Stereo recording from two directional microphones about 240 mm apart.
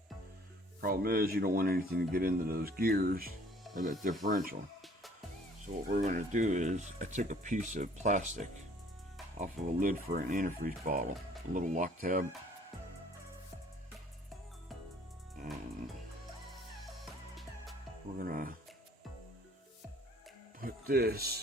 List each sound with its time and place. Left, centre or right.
0.8 s speech: right
5.6 s speech: right
18.2 s speech: right
20.6 s speech: right